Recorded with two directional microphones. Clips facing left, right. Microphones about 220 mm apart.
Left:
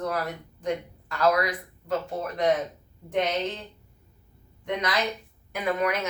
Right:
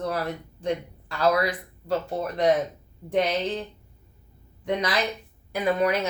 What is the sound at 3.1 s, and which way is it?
Speech, 35° right (ahead or behind).